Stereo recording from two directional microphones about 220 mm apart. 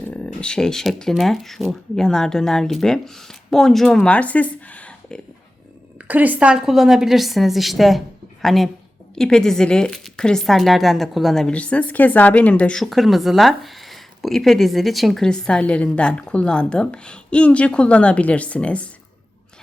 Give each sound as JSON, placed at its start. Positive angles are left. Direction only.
{"t": 0.0, "sound": "speech", "side_deg": 5}
{"t": 6.1, "sound": "speech", "side_deg": -10}